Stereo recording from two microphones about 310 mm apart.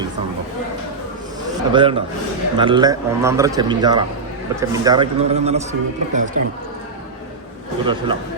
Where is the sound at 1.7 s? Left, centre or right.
Centre.